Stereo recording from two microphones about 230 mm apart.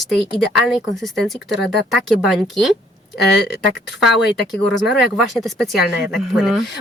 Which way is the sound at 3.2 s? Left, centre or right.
Left.